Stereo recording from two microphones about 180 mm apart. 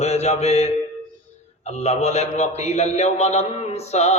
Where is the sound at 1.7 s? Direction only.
35° left (ahead or behind).